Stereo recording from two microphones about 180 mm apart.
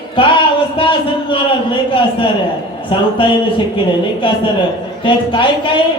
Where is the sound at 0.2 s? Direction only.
30° left (ahead or behind).